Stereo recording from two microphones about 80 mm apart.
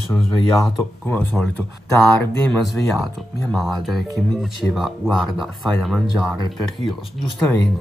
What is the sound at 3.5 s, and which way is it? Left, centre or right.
Speech, centre.